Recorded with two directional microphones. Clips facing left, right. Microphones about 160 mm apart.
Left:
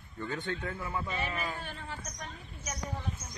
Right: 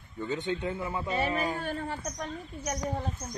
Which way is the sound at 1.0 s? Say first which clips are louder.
Right 6 dB; 40° right (ahead or behind).